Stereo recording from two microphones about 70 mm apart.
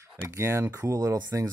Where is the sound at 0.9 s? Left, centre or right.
Right.